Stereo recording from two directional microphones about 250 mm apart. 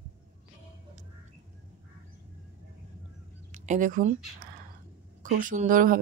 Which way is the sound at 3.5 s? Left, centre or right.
Right.